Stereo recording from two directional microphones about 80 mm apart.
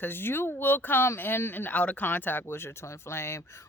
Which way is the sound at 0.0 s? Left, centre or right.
Left.